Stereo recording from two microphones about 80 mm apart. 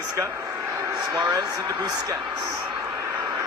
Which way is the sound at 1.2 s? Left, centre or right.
Right.